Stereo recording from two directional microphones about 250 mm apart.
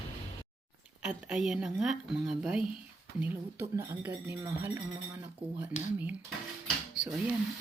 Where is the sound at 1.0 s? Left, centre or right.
Centre.